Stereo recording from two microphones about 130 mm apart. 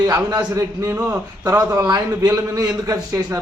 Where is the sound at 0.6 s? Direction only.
20° right (ahead or behind).